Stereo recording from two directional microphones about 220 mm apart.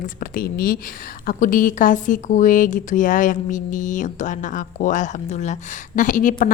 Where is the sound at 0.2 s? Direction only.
40° left (ahead or behind).